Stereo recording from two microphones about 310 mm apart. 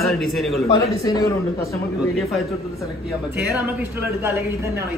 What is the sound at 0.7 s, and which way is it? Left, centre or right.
A man's voice, centre.